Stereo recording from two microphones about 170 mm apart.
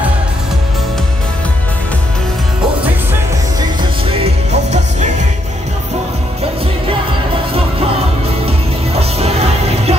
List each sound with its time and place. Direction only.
4.2 s music: 40° right (ahead or behind)
8.5 s music: 35° right (ahead or behind)